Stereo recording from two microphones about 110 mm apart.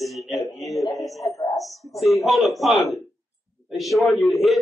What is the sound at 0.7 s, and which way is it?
Speech, 30° left (ahead or behind).